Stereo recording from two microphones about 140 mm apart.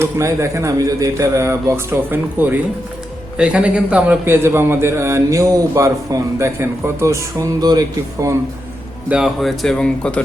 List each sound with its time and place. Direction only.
0.0 s a man's voice: 20° right (ahead or behind)
9.0 s speech: 5° right (ahead or behind)